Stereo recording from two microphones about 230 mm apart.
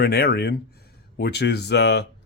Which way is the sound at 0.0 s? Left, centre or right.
Left.